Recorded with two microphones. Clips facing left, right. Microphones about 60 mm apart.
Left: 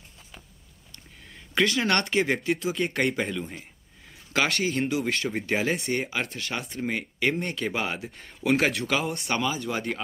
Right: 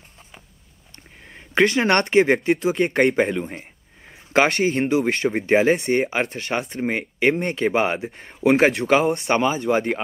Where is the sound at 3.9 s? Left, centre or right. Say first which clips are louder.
Right 8 dB; right.